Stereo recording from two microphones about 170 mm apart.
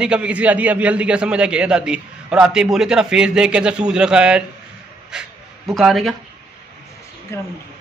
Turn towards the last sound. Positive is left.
turn(degrees=15)  # may be behind; listen again after turning